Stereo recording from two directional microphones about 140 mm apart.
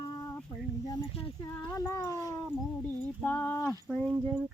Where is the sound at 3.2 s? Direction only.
15° left (ahead or behind).